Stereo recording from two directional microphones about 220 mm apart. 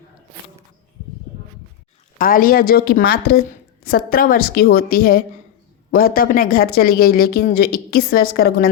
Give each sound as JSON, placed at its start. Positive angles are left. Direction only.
{"t": 2.1, "sound": "a woman's voice", "side_deg": 40}